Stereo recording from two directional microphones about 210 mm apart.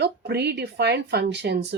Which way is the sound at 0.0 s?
50° right (ahead or behind).